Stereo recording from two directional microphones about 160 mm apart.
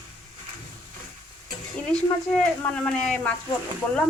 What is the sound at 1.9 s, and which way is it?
Speech, 5° left (ahead or behind).